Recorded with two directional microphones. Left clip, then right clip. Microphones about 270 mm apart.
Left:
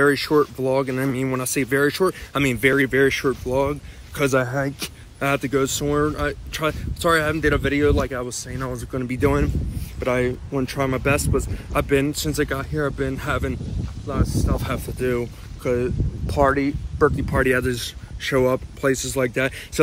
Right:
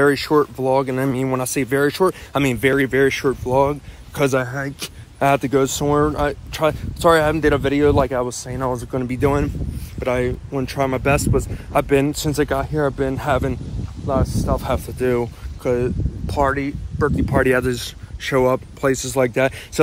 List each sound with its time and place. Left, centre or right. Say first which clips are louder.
0.0 s speech: right 2 dB; centre
4.3 s speech: even; centre
5.2 s speech: right 5 dB; centre
19.0 s speech: right 4 dB; centre